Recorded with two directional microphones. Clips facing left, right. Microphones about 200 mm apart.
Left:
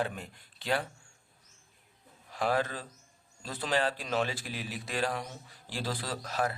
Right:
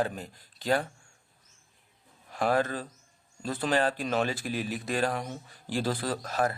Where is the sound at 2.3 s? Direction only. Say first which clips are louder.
Right 3 dB; 50° right (ahead or behind).